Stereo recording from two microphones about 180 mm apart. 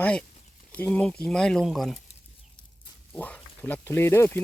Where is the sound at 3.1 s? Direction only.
5° left (ahead or behind).